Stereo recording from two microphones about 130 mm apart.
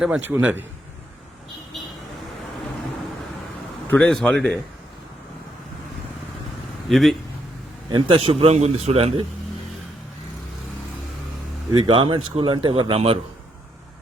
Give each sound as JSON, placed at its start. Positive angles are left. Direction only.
{"t": 0.2, "sound": "a man's voice", "side_deg": -15}
{"t": 3.8, "sound": "a man's voice", "side_deg": 15}
{"t": 6.8, "sound": "speech", "side_deg": 0}
{"t": 7.9, "sound": "a man's voice", "side_deg": -40}
{"t": 11.7, "sound": "speech", "side_deg": -40}